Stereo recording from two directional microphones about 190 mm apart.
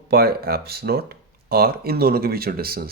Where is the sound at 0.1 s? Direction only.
55° right (ahead or behind).